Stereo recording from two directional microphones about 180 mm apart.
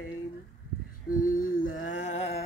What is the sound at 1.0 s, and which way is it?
Music, 50° left (ahead or behind).